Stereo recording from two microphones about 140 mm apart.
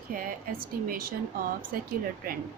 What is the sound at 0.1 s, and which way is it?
A woman's voice, 90° right.